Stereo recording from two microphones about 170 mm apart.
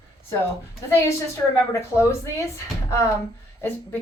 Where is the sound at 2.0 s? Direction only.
15° left (ahead or behind).